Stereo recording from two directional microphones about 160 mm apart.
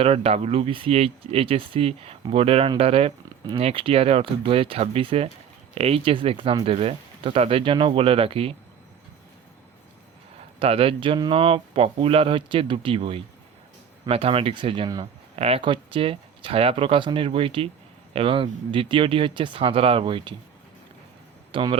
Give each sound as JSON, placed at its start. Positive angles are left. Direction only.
{"t": 0.0, "sound": "speech", "side_deg": -40}
{"t": 10.6, "sound": "speech", "side_deg": -35}
{"t": 21.5, "sound": "speech", "side_deg": -30}